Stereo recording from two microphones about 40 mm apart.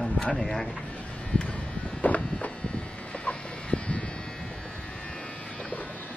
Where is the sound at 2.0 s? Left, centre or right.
Left.